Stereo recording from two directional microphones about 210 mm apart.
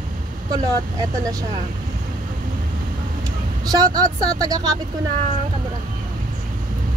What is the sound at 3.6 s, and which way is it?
Speech, 20° right (ahead or behind).